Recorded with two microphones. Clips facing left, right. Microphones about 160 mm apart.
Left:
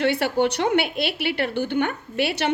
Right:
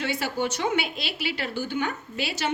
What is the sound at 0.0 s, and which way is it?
A woman's voice, 65° left (ahead or behind).